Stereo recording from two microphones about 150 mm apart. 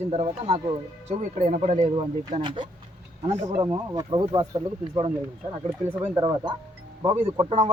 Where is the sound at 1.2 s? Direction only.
60° right (ahead or behind).